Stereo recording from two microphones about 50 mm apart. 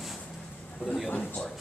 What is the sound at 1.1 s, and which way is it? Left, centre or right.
Speech, left.